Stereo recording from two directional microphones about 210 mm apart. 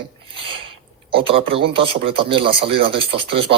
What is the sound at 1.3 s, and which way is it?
Speech, 25° right (ahead or behind).